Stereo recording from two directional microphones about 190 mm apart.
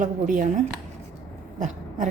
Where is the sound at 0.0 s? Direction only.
45° right (ahead or behind).